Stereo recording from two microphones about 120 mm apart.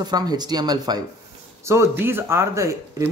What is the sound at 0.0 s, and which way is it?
Speech, 35° right (ahead or behind).